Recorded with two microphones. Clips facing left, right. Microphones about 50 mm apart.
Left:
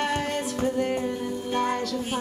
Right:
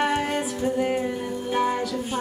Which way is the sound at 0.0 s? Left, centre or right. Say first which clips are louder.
Right 3 dB; centre.